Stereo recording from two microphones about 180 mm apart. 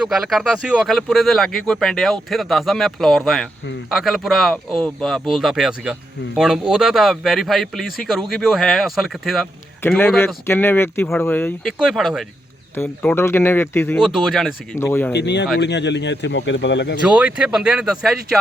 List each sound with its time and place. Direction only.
0.0 s speech: 5° right (ahead or behind)
9.8 s speech: 15° left (ahead or behind)
11.6 s speech: centre (ahead or behind)
12.7 s speech: 10° left (ahead or behind)
14.0 s speech: centre (ahead or behind)
14.8 s speech: 15° left (ahead or behind)
15.1 s speech: 70° left (ahead or behind)
17.1 s speech: 5° right (ahead or behind)